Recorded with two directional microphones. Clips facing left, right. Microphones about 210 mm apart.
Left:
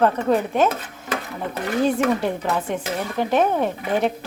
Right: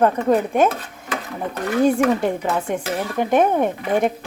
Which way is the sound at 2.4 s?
15° right (ahead or behind).